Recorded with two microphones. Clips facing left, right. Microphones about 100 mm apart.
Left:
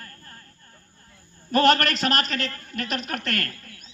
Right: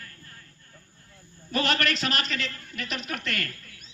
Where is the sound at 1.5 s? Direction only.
45° left (ahead or behind).